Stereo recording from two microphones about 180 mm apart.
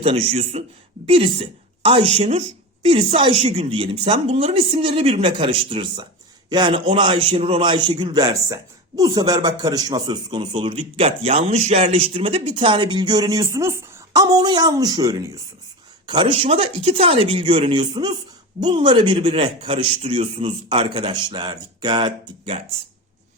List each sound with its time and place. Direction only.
0.0 s a woman's voice: 35° right (ahead or behind)